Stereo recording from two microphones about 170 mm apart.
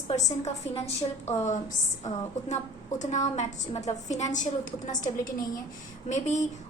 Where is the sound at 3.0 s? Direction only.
45° left (ahead or behind).